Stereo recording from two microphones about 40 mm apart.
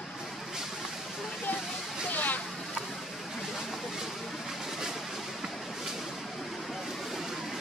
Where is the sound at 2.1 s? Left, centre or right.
Left.